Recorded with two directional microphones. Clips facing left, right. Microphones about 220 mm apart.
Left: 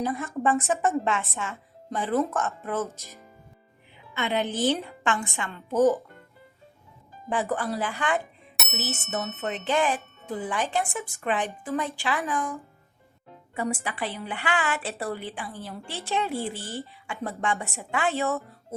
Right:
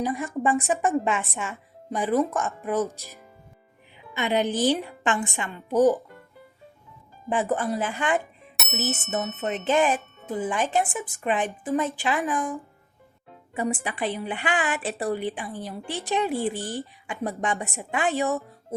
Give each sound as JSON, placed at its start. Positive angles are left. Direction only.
{"t": 0.0, "sound": "a woman's voice", "side_deg": -15}
{"t": 7.3, "sound": "speech", "side_deg": -20}
{"t": 8.5, "sound": "bicycle bell", "side_deg": 0}
{"t": 9.4, "sound": "a woman's voice", "side_deg": -20}